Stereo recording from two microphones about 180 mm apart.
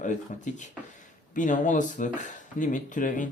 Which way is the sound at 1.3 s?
45° left (ahead or behind).